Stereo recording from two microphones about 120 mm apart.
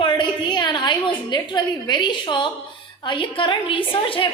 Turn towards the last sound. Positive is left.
turn(degrees=45)  # may be behind; listen again after turning